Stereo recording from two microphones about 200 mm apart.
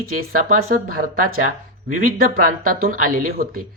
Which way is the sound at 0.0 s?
45° right (ahead or behind).